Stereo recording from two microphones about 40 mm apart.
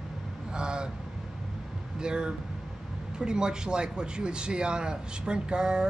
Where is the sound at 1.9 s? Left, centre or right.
Right.